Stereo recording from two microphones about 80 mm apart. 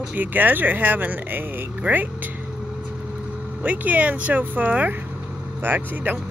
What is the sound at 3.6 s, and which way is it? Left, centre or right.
Speech, centre.